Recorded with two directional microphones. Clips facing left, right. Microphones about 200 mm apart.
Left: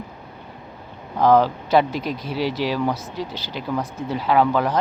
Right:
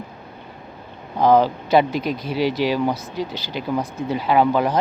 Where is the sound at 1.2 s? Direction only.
5° left (ahead or behind).